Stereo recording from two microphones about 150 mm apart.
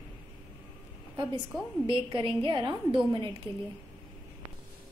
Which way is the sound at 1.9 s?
35° right (ahead or behind).